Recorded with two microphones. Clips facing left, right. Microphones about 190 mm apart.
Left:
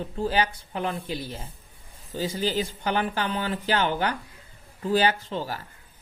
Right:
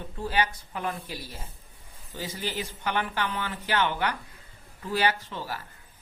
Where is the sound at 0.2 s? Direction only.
30° left (ahead or behind).